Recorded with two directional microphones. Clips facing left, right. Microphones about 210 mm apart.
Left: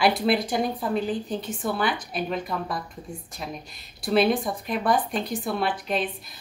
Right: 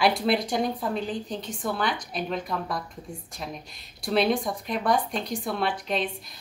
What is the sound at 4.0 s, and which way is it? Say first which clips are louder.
A woman's voice: left 2 dB; 5° left (ahead or behind).